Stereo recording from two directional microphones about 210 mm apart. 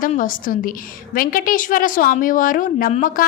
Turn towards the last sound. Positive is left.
turn(degrees=40)  # may be behind; listen again after turning